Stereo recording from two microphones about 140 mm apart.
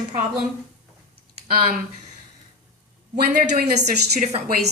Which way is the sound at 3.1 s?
90° right.